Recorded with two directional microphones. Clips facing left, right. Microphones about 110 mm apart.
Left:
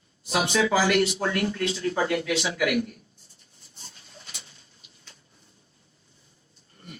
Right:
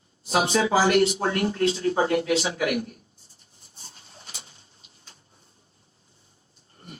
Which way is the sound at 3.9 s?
30° right (ahead or behind).